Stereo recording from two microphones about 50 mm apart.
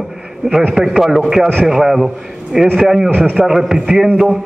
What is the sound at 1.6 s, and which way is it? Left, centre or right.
A man's voice, centre.